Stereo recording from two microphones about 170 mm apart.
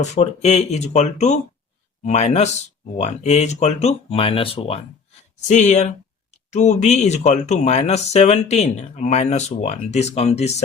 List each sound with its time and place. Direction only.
0.0 s speech: 40° left (ahead or behind)
5.5 s speech: 45° left (ahead or behind)